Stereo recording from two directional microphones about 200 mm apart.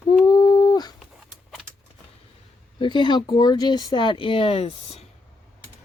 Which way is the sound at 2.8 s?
25° left (ahead or behind).